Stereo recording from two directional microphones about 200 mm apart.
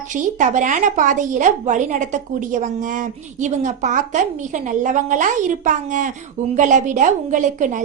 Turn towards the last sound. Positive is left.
turn(degrees=-40)  # may be behind; listen again after turning